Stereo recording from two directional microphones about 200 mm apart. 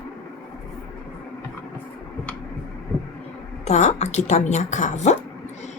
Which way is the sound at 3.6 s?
35° left (ahead or behind).